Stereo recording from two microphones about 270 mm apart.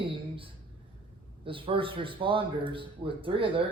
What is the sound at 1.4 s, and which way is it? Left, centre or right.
Speech, centre.